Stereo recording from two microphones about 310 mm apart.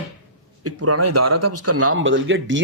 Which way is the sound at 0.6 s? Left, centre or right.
Right.